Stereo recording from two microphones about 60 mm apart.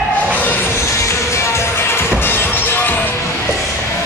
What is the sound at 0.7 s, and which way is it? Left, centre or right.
Music, left.